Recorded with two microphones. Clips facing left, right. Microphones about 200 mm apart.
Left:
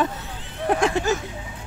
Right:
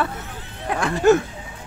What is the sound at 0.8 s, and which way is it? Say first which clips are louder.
Speech: right 10 dB; 60° right (ahead or behind).